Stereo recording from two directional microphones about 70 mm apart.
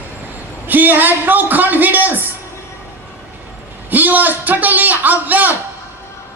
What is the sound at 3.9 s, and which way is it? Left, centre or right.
A man's voice, right.